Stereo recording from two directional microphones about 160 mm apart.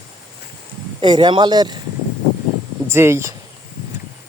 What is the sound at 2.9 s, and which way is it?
Speech, 15° right (ahead or behind).